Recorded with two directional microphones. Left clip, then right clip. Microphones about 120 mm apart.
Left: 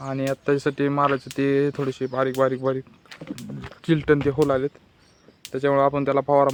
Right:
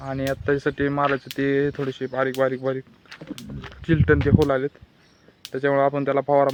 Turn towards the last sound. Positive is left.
turn(degrees=20)  # may be behind; listen again after turning